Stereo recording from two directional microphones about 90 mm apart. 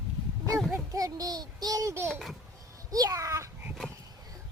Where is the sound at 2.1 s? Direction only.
5° left (ahead or behind).